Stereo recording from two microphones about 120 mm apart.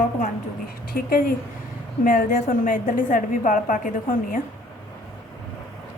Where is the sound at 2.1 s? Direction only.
90° left.